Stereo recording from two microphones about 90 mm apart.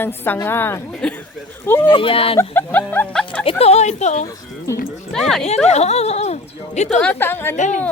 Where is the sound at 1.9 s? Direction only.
75° left (ahead or behind).